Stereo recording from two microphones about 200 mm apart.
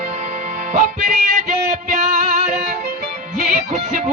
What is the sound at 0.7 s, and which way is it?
Music, 40° right (ahead or behind).